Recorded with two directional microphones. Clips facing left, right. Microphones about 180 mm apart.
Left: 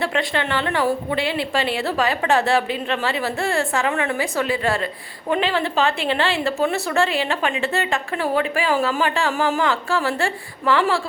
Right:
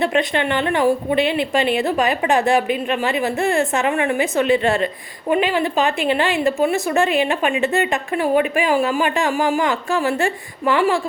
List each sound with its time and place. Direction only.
0.0 s speech: 20° right (ahead or behind)